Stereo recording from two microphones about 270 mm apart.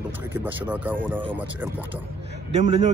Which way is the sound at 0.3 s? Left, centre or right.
Centre.